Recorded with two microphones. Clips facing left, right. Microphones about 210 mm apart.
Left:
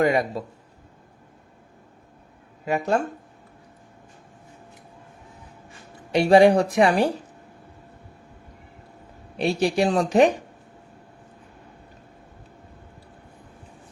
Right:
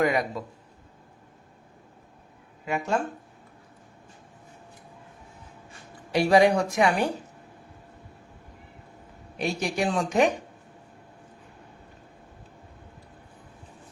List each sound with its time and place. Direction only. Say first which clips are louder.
0.0 s speech: left 3 dB; 30° left (ahead or behind)
2.6 s speech: left 4 dB; 35° left (ahead or behind)
6.1 s speech: left 4 dB; 25° left (ahead or behind)
9.4 s speech: left 6 dB; 30° left (ahead or behind)